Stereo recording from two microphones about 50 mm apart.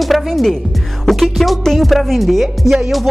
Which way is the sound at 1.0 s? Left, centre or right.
Centre.